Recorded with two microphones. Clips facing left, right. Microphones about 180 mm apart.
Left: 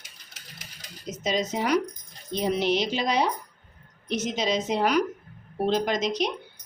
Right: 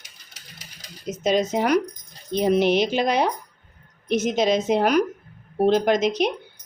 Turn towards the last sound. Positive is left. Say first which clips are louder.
# right 6 dB
turn(degrees=-55)  # may be behind; listen again after turning